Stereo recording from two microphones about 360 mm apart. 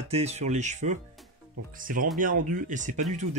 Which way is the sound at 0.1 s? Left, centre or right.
Centre.